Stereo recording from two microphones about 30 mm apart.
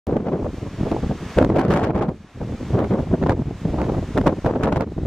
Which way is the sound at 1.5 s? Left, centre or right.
Centre.